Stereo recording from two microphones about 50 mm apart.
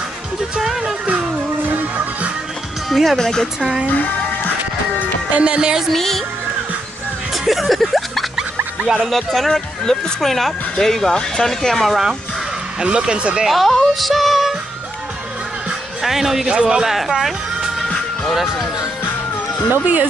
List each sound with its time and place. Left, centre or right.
0.6 s music: centre
2.9 s speech: centre
3.9 s music: left
5.3 s speech: right
5.9 s speech: centre
7.4 s a sound: centre
9.0 s speech: centre
13.0 s speech: centre
13.5 s speech: centre
16.0 s speech: centre
19.7 s speech: right